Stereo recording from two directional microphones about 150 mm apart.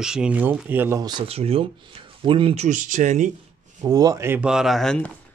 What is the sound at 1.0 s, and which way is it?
Speech, 30° right (ahead or behind).